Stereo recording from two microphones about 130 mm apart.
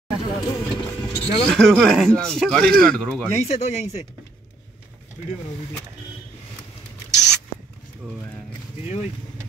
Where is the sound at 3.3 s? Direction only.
55° left (ahead or behind).